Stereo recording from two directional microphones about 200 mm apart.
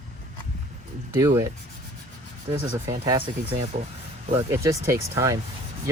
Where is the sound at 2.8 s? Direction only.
20° right (ahead or behind).